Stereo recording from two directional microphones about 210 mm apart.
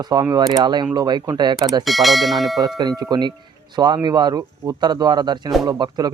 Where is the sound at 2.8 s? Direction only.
20° right (ahead or behind).